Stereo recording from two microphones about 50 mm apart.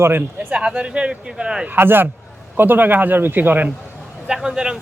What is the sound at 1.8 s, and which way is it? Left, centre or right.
A man's voice, right.